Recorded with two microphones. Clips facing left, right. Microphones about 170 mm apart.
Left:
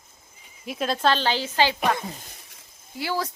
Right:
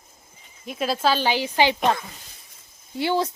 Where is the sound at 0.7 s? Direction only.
5° right (ahead or behind).